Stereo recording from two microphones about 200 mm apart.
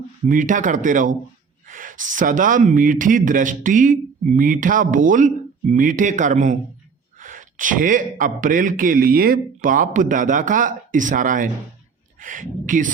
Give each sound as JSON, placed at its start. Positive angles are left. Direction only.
{"t": 0.3, "sound": "speech", "side_deg": -40}